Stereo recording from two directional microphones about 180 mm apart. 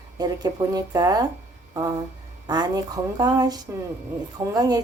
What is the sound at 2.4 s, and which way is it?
A woman's voice, 20° right (ahead or behind).